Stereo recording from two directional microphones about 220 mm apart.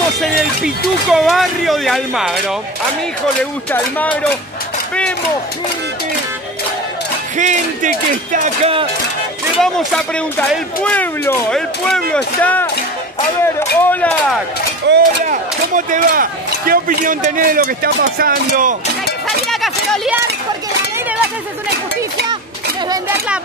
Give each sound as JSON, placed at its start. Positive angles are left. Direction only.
{"t": 0.4, "sound": "speech", "side_deg": 0}
{"t": 7.3, "sound": "speech", "side_deg": -35}
{"t": 9.6, "sound": "speech", "side_deg": 0}
{"t": 14.9, "sound": "speech", "side_deg": -50}
{"t": 15.2, "sound": "speech", "side_deg": -35}
{"t": 19.2, "sound": "speech", "side_deg": 0}
{"t": 22.8, "sound": "speech", "side_deg": -10}